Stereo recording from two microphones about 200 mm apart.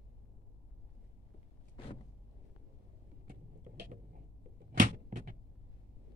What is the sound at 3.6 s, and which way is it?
Vehicle, 40° right (ahead or behind).